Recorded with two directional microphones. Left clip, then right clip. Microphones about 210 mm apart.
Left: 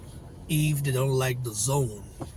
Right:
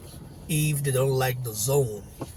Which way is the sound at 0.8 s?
20° right (ahead or behind).